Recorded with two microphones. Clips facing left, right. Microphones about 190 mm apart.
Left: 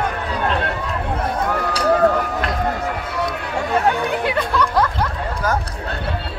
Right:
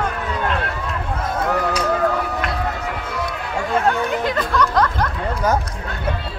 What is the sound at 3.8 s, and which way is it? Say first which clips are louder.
Chatter: even; 10° left (ahead or behind).